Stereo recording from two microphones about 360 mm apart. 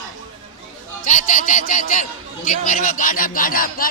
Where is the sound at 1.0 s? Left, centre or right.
Left.